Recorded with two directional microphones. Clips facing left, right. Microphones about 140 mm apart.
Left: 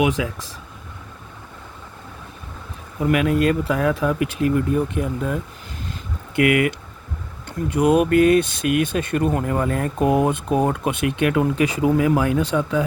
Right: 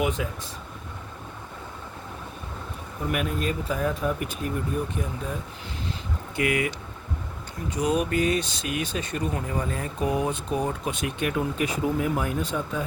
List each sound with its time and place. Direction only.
0.0 s speech: 90° left
3.0 s speech: 90° left
6.3 s speech: 60° left (ahead or behind); by 12.8 s 80° left